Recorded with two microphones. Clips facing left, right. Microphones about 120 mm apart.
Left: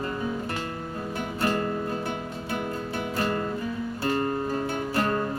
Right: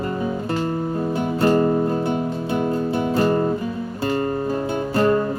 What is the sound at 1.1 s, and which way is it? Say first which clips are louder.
Music: right 9 dB; 25° right (ahead or behind).